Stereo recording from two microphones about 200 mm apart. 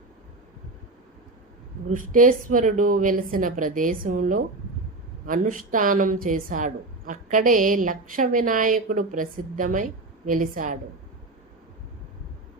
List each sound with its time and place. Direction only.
1.9 s a woman's voice: 40° right (ahead or behind)